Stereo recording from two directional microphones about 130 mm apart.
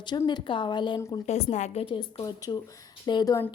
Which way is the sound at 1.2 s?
60° left (ahead or behind).